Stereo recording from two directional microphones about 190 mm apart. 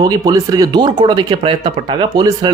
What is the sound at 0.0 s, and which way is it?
A man's voice, 20° right (ahead or behind).